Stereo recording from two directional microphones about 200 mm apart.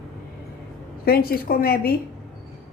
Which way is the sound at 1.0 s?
50° left (ahead or behind).